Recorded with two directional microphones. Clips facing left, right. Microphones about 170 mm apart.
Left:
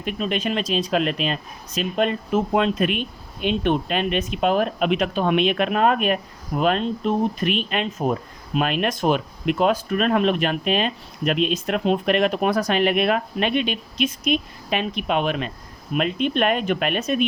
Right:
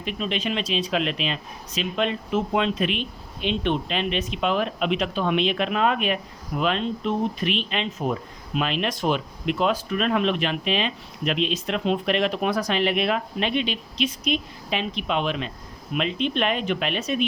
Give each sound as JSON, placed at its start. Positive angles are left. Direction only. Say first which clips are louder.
{"t": 0.0, "sound": "speech", "louder": "left 3 dB", "side_deg": 50}